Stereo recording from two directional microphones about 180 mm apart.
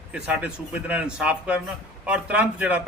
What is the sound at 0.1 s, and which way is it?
A man's voice, 5° right (ahead or behind).